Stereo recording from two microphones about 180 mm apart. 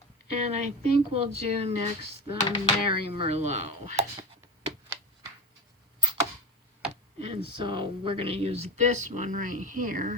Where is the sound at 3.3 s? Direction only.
40° right (ahead or behind).